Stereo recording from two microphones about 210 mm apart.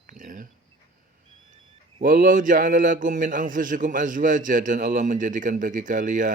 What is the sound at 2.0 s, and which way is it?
A man's voice, 40° right (ahead or behind).